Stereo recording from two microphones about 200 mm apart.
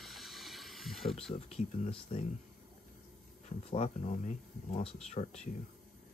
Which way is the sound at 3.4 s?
35° left (ahead or behind).